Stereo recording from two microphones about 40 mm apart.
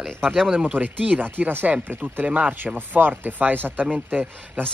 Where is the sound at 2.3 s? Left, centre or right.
Right.